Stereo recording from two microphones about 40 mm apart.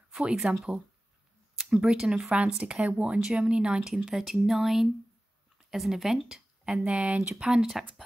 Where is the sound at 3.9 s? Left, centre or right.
Centre; by 7.2 s right.